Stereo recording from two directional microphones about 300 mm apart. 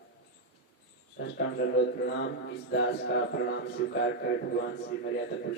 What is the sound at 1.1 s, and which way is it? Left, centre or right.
A man's voice, left.